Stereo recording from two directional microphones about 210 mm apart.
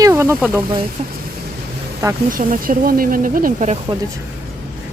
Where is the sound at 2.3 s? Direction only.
40° right (ahead or behind).